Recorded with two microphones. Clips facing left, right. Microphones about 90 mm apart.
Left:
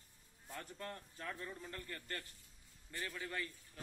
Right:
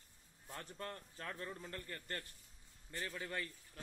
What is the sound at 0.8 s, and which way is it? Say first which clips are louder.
A man's voice: even; 40° right (ahead or behind).